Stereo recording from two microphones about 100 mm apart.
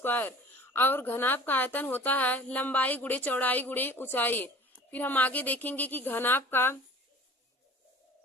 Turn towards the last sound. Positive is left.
turn(degrees=20)  # may be behind; listen again after turning